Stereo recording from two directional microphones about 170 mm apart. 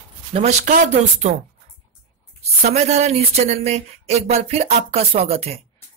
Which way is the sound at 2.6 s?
40° right (ahead or behind).